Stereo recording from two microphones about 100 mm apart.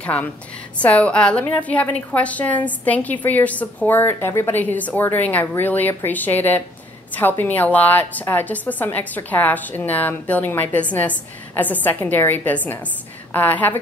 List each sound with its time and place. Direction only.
0.0 s a woman's voice: 15° left (ahead or behind)